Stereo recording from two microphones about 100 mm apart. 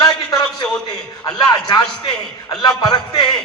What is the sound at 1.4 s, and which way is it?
A man's voice, 40° left (ahead or behind).